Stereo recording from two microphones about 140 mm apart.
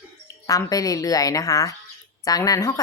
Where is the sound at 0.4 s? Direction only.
25° left (ahead or behind).